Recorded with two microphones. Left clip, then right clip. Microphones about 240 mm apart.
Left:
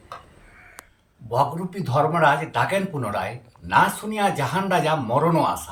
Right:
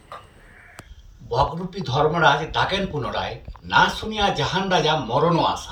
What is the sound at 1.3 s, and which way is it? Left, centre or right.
Speech, left.